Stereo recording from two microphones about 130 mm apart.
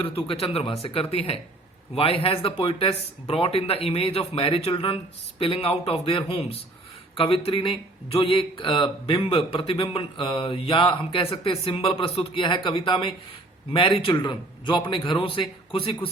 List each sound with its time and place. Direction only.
0.0 s a man's voice: 45° left (ahead or behind)